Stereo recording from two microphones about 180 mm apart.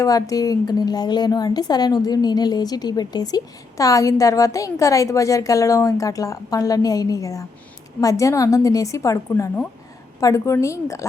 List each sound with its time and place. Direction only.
0.0 s a woman's voice: 20° left (ahead or behind)